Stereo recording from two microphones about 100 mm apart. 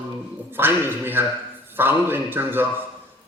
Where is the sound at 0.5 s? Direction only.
20° right (ahead or behind).